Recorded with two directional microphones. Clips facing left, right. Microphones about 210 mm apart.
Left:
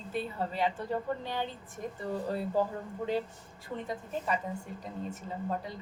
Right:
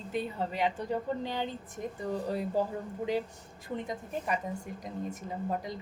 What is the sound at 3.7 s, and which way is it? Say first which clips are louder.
Speech: right 1 dB; 15° right (ahead or behind).